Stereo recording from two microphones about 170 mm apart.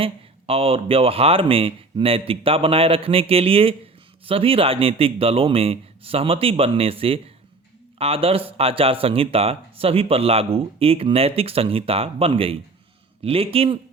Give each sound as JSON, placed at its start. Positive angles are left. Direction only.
{"t": 0.0, "sound": "speech", "side_deg": -35}